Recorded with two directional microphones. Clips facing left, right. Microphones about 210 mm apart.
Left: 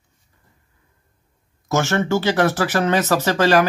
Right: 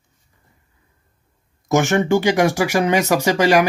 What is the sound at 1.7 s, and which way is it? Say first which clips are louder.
Speech: right 3 dB; 15° right (ahead or behind).